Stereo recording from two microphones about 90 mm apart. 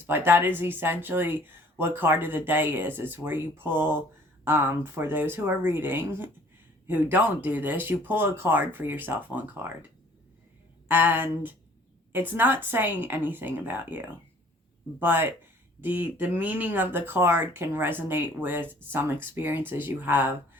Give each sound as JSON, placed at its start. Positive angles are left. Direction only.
{"t": 0.0, "sound": "speech", "side_deg": -25}
{"t": 10.8, "sound": "speech", "side_deg": -20}